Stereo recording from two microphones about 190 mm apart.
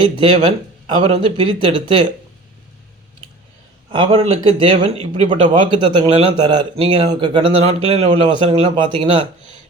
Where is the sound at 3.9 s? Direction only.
30° right (ahead or behind).